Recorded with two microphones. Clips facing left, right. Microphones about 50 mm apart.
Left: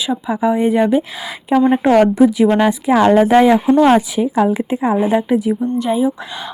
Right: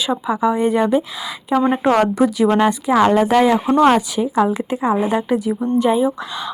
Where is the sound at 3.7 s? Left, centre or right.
Right.